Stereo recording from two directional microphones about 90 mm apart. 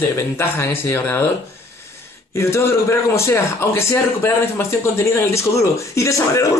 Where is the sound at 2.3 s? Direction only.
30° left (ahead or behind).